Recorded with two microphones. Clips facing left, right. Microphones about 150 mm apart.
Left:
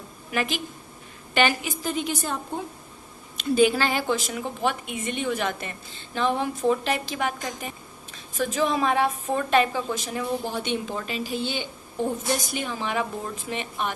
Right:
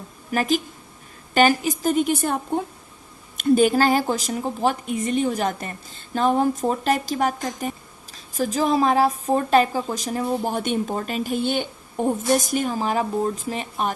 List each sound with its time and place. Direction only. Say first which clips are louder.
0.3 s a woman's voice: right 6 dB; 40° right (ahead or behind)